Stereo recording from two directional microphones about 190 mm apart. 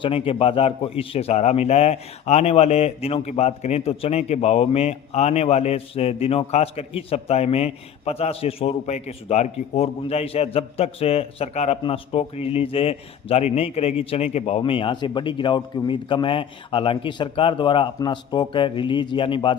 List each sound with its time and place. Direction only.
0.0 s a man's voice: 30° left (ahead or behind)